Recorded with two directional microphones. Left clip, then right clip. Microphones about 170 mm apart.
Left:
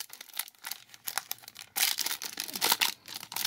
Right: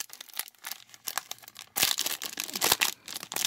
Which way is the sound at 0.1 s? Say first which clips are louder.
Right 1 dB; 20° right (ahead or behind).